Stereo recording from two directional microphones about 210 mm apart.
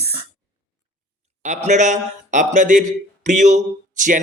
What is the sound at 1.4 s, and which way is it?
Speech, 35° right (ahead or behind).